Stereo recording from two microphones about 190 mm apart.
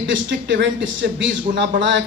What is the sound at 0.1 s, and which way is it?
A man's voice, 70° right (ahead or behind).